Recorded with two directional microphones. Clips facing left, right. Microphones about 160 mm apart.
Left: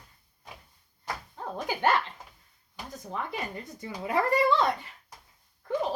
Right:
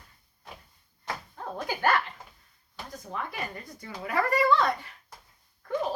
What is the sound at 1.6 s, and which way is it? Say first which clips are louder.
Speech: even; 20° left (ahead or behind).